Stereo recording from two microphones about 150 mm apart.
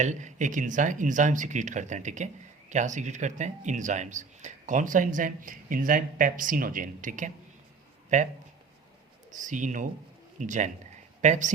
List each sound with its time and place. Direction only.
0.0 s speech: 55° right (ahead or behind)
9.3 s speech: 55° right (ahead or behind)